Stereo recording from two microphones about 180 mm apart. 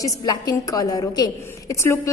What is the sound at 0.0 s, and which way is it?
A woman's voice, 20° left (ahead or behind).